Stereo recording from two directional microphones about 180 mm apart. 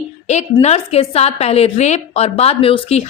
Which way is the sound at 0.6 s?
35° left (ahead or behind).